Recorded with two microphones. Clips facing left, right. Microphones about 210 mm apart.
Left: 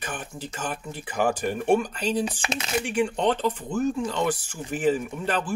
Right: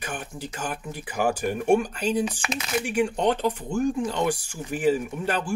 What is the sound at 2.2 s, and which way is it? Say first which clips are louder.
Speech: even; 30° left (ahead or behind).